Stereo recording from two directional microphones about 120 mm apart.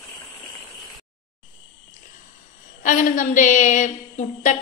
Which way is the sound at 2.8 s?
90° left.